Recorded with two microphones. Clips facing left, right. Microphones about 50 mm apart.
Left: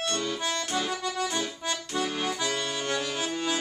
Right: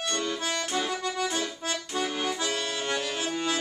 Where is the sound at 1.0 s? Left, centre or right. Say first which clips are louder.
Even; right.